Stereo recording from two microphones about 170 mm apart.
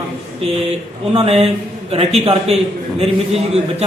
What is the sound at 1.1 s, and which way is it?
A man's voice, 35° right (ahead or behind).